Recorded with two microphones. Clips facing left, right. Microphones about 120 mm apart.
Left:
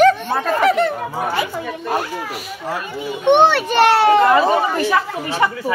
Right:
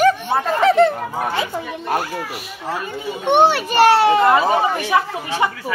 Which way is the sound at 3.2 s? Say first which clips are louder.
Left 2 dB; 10° right (ahead or behind).